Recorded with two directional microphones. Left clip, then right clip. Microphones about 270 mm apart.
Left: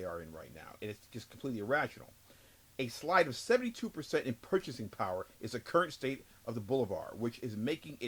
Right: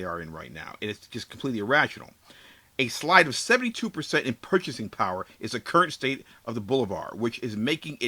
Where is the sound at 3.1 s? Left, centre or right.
Centre.